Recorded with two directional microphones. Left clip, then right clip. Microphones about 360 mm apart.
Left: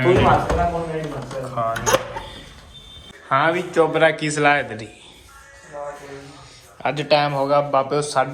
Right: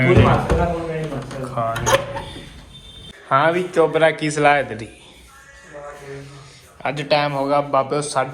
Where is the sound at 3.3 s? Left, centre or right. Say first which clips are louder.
Right 2 dB; centre.